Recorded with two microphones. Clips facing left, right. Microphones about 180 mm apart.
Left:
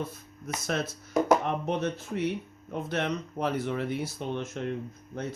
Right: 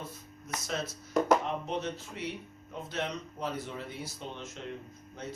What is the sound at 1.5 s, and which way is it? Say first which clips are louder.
Speech: left 5 dB; 60° left (ahead or behind).